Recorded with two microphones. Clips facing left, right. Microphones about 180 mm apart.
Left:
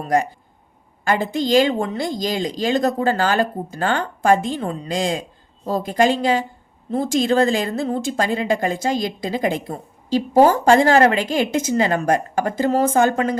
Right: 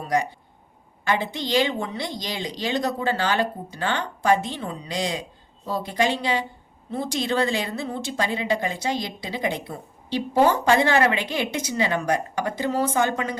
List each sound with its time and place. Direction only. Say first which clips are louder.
1.0 s a woman's voice: left 5 dB; 45° left (ahead or behind)